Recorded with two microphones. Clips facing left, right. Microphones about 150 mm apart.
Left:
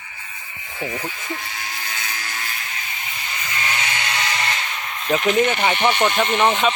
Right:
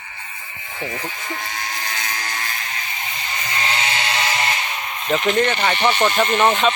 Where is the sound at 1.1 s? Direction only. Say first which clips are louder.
Right 1 dB; 45° right (ahead or behind).